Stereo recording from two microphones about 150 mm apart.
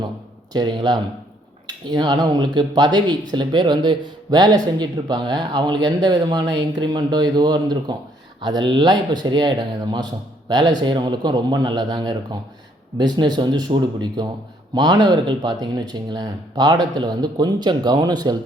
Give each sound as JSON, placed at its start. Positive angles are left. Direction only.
{"t": 0.5, "sound": "speech", "side_deg": -30}